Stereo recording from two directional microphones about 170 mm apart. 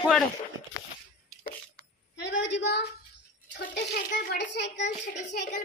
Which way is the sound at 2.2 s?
90° left.